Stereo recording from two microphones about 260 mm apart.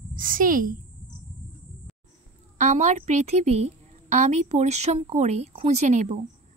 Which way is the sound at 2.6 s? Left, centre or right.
Right.